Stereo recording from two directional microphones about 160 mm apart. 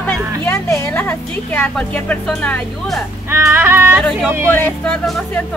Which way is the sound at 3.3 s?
15° right (ahead or behind).